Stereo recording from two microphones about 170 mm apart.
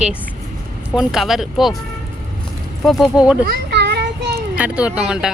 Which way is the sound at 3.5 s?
75° right (ahead or behind).